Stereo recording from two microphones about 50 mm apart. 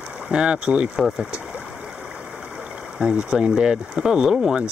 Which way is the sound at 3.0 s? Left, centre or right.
Centre.